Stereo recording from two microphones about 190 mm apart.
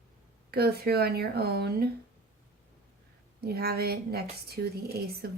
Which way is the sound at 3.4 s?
55° right (ahead or behind).